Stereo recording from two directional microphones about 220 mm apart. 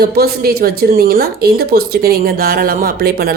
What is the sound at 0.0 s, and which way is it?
Speech, 45° right (ahead or behind).